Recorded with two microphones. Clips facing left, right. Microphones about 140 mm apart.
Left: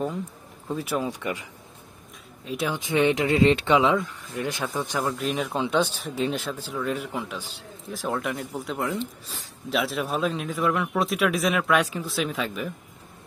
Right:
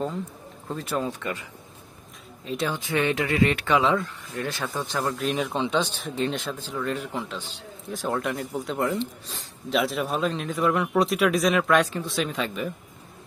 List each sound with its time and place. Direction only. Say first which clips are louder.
0.7 s speech: left 1 dB; 5° left (ahead or behind)
4.9 s speech: right 1 dB; 5° left (ahead or behind)
7.9 s a man's voice: right 1 dB; centre (ahead or behind)